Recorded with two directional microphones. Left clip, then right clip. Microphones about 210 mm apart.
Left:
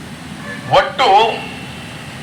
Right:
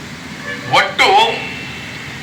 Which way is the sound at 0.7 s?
40° left (ahead or behind).